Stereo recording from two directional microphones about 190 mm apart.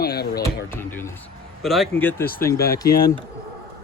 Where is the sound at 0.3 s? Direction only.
15° left (ahead or behind).